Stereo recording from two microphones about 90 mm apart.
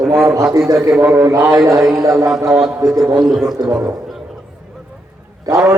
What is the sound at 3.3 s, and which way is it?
Speech, 5° right (ahead or behind).